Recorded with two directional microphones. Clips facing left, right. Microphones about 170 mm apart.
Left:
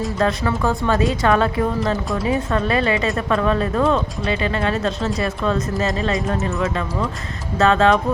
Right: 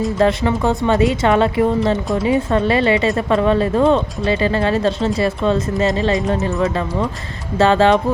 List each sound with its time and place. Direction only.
0.2 s speech: 25° right (ahead or behind)